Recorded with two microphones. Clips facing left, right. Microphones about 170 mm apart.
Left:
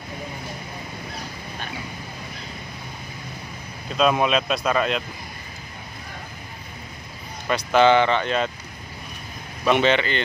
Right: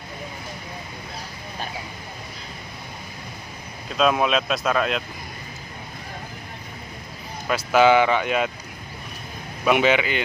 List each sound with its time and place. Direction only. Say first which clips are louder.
3.9 s speech: even; centre (ahead or behind)
7.4 s speech: even; 5° right (ahead or behind)
9.7 s speech: even; 10° right (ahead or behind)